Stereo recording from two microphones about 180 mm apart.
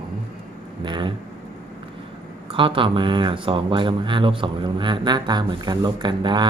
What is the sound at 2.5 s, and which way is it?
Speech, 30° right (ahead or behind).